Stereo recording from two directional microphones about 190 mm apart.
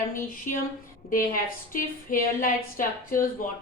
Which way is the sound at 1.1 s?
50° left (ahead or behind).